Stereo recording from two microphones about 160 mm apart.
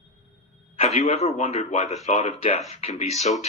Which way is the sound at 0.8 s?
45° left (ahead or behind).